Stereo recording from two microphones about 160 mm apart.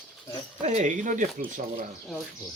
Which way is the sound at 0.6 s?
45° right (ahead or behind).